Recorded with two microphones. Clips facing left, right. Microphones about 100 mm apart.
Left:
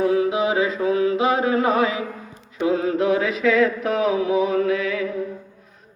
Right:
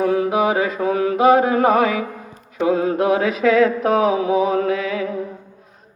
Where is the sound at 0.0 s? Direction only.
55° right (ahead or behind).